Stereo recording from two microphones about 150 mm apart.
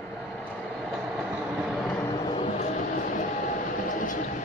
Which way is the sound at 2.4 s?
50° left (ahead or behind).